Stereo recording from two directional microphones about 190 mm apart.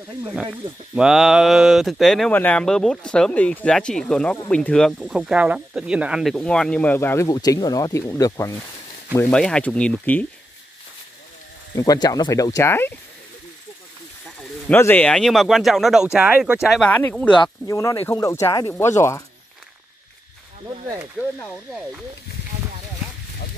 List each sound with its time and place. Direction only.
0.9 s speech: centre (ahead or behind); by 8.5 s 15° left (ahead or behind)
9.1 s speech: 5° left (ahead or behind)
11.7 s speech: 20° left (ahead or behind)
14.7 s speech: 10° left (ahead or behind)